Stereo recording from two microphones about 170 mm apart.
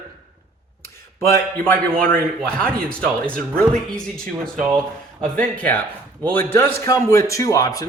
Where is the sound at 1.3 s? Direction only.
10° left (ahead or behind).